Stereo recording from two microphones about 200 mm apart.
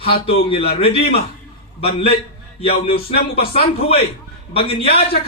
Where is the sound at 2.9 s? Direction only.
50° left (ahead or behind).